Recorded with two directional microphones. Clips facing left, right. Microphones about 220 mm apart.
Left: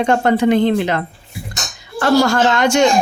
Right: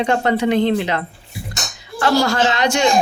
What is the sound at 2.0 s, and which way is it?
Speech, 50° left (ahead or behind).